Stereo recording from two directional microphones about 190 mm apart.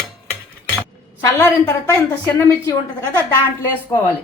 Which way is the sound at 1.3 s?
15° left (ahead or behind).